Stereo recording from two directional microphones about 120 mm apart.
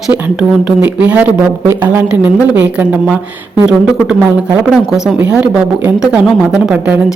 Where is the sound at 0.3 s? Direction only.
10° right (ahead or behind).